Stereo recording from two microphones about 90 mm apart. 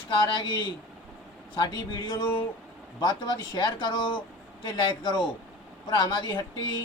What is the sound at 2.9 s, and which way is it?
A man's voice, 60° left (ahead or behind).